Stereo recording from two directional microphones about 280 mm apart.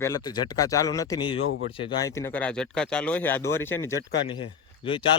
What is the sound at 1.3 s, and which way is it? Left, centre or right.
Speech, left.